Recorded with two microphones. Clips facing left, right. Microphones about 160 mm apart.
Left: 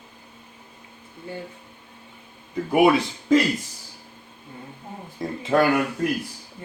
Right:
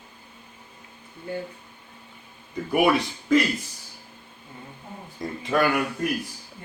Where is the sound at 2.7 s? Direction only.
25° left (ahead or behind).